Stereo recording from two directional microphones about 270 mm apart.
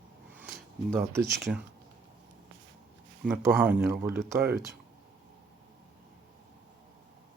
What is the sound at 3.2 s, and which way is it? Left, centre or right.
Speech, centre.